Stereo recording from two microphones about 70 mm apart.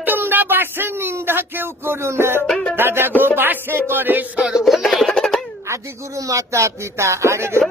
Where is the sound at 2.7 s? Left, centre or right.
Right.